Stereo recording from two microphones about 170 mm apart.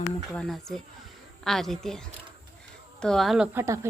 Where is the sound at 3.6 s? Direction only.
15° right (ahead or behind).